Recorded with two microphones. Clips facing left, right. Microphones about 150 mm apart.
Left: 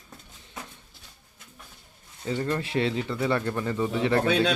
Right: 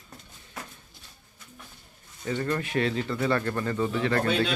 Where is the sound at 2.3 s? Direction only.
25° left (ahead or behind).